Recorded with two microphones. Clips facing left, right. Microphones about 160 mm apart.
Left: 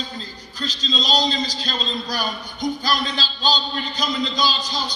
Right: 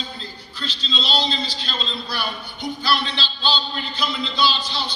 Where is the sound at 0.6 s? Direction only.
40° left (ahead or behind).